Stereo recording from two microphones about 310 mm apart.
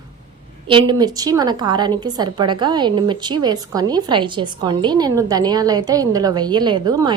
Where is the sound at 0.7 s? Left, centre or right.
Centre.